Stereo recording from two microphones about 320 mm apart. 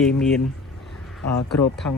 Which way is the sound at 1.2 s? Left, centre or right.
Left.